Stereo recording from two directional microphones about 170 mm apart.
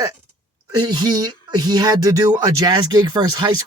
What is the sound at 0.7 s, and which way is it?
A woman's voice, 25° right (ahead or behind).